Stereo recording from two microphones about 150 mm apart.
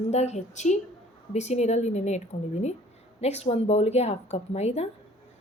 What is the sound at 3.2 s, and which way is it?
A woman's voice, 45° left (ahead or behind).